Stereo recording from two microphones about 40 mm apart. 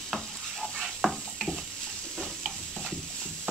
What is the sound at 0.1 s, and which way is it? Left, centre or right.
Stir, centre.